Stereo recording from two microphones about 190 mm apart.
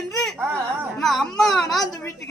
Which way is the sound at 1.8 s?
20° left (ahead or behind).